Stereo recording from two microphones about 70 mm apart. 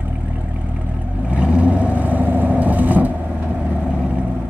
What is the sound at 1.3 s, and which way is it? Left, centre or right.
Vehicle, centre.